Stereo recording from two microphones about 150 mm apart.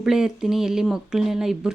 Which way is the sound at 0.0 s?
5° right (ahead or behind).